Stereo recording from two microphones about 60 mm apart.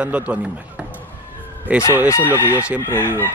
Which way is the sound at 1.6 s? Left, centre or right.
Right.